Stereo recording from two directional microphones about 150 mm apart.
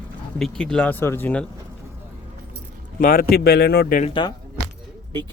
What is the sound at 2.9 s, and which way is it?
Speech, 75° left (ahead or behind).